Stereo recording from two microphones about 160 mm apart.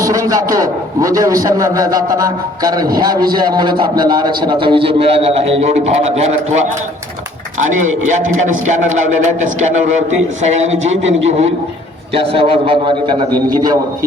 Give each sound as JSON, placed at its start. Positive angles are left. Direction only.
{"t": 0.0, "sound": "a man's voice", "side_deg": -20}
{"t": 7.7, "sound": "a man's voice", "side_deg": -55}